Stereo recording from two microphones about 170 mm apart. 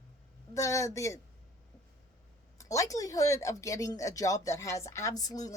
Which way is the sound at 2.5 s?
20° left (ahead or behind).